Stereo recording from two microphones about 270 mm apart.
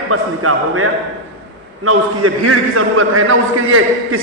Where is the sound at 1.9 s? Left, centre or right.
Right.